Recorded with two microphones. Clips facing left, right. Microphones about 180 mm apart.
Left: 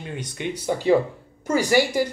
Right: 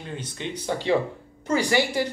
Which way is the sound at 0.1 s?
10° left (ahead or behind).